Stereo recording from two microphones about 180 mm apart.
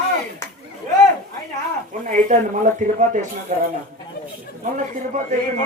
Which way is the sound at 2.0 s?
45° right (ahead or behind).